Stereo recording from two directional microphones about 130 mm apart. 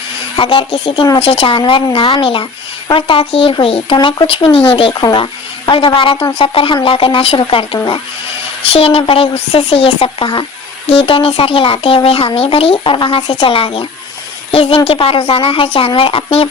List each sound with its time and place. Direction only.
0.3 s speech: 40° left (ahead or behind)